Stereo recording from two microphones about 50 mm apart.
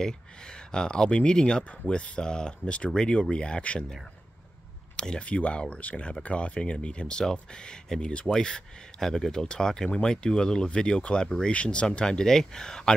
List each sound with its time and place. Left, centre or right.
0.7 s speech: centre
4.9 s speech: centre